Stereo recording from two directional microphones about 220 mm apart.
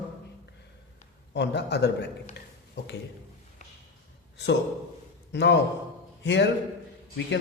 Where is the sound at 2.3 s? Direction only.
50° left (ahead or behind).